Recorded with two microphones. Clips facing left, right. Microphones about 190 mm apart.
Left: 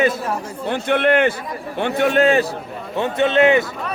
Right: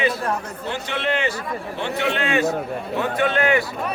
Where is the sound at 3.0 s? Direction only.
25° left (ahead or behind).